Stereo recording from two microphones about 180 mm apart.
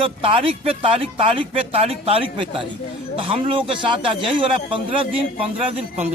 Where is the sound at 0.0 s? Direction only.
30° right (ahead or behind).